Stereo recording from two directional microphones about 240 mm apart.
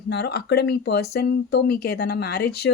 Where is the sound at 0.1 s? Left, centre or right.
Left.